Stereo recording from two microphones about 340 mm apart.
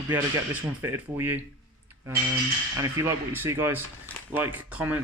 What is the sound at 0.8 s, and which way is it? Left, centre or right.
Speech, centre.